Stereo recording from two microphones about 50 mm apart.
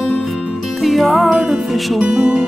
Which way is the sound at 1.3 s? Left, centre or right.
Centre.